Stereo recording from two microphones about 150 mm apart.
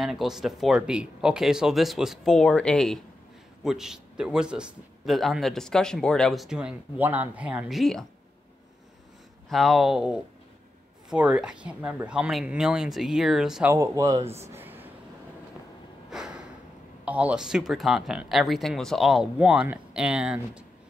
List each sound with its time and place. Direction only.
0.0 s a man's voice: centre (ahead or behind)
9.5 s a man's voice: centre (ahead or behind)
13.7 s speech: 20° right (ahead or behind)
14.4 s a sound: 15° right (ahead or behind)
16.1 s a sound: 5° right (ahead or behind)
17.0 s a man's voice: 10° right (ahead or behind)